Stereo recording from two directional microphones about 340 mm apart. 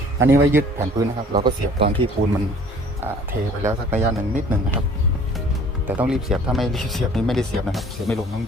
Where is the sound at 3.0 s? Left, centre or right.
Centre.